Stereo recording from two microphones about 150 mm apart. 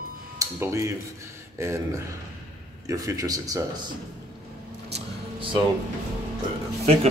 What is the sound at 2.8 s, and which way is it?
A man's voice, 20° right (ahead or behind).